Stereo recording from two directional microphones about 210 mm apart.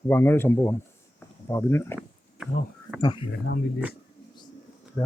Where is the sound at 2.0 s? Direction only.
5° right (ahead or behind).